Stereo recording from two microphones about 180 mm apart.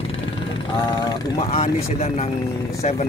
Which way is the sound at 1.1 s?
35° left (ahead or behind).